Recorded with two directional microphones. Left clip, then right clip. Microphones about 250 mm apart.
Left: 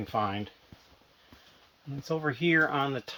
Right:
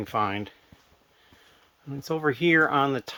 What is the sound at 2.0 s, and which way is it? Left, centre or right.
Speech, right.